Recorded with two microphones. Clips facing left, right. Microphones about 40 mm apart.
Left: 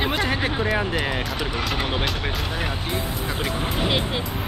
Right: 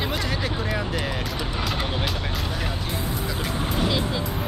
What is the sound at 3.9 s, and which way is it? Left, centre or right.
Speech, left.